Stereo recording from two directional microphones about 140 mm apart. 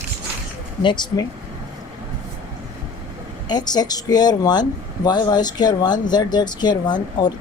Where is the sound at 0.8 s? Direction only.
35° left (ahead or behind).